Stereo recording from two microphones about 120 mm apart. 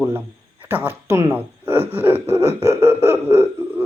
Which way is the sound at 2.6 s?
25° right (ahead or behind).